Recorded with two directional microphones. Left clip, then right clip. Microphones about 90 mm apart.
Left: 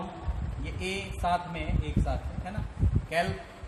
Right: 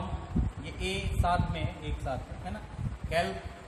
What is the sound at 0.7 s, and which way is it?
Speech, 40° right (ahead or behind).